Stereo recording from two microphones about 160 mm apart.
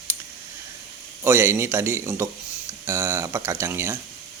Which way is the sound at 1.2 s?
15° right (ahead or behind).